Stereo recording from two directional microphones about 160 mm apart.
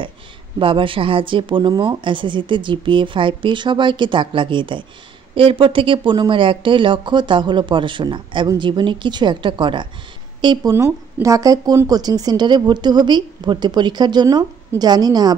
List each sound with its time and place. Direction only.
0.6 s speech: 35° right (ahead or behind)